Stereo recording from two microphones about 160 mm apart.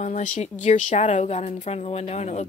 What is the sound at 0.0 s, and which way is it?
Speech, 50° left (ahead or behind).